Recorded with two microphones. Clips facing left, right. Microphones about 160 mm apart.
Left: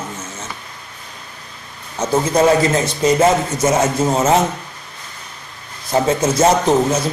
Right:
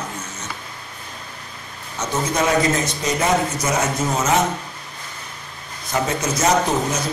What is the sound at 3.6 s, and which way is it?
Speech, 30° left (ahead or behind).